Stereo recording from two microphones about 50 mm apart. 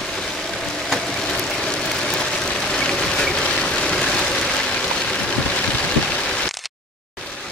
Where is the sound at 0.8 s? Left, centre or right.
Centre.